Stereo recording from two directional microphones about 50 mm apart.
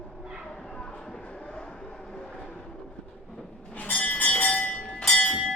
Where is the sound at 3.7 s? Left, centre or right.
Left.